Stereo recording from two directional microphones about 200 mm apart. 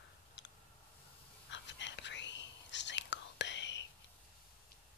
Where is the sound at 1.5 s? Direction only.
65° left (ahead or behind).